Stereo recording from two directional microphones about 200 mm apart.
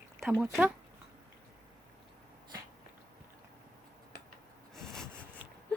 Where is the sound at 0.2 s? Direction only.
Centre (ahead or behind).